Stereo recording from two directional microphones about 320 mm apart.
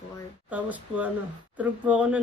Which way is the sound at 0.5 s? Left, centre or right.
Centre.